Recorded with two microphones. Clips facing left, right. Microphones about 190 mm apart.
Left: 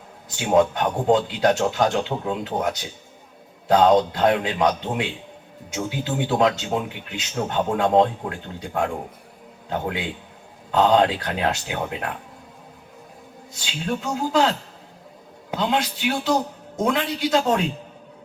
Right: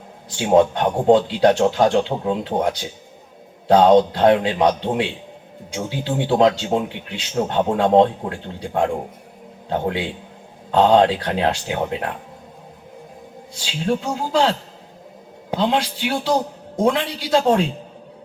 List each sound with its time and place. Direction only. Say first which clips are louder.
0.3 s speech: right 3 dB; 30° right (ahead or behind)
13.7 s speech: right 4 dB; 30° right (ahead or behind)